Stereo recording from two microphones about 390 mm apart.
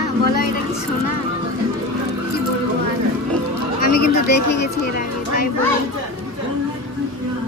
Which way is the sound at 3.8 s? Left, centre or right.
Left.